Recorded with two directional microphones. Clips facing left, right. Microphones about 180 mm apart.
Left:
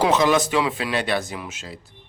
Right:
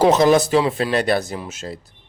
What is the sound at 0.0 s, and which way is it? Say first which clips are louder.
Speech: right 5 dB; 40° right (ahead or behind).